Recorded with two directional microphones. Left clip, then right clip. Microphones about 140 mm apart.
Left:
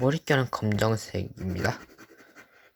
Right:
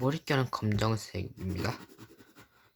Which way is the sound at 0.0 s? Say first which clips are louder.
Left 6 dB; 15° left (ahead or behind).